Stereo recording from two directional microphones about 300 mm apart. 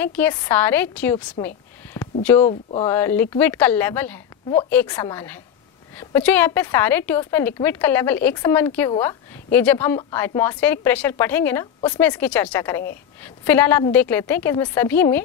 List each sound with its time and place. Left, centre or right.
0.0 s a woman's voice: centre
2.0 s a sound: centre
2.4 s speech: centre
2.9 s a woman's voice: centre